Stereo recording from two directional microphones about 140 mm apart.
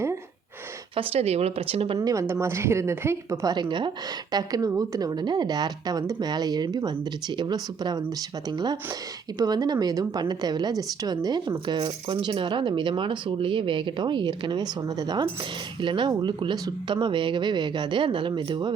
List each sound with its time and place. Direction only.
0.9 s speech: 45° right (ahead or behind)
2.0 s a woman's voice: 20° right (ahead or behind)
3.5 s a woman's voice: 35° right (ahead or behind)